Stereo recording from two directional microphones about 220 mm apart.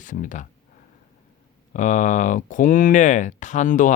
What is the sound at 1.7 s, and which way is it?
Speech, 35° left (ahead or behind).